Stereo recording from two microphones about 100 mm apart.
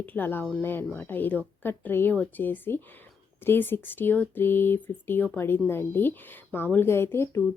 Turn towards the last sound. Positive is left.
turn(degrees=25)  # may be behind; listen again after turning